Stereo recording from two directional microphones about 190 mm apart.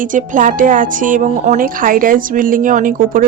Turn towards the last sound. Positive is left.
turn(degrees=-45)  # may be behind; listen again after turning